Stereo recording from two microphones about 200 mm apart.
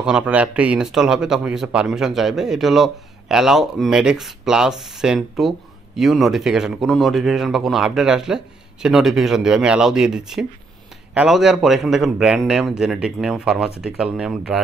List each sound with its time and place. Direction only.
0.0 s speech: 5° right (ahead or behind)